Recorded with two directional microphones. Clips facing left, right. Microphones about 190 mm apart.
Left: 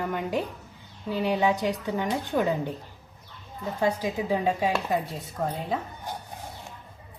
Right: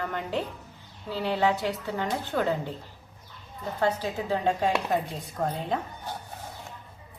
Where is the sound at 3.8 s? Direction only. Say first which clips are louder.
Left 1 dB; 10° left (ahead or behind).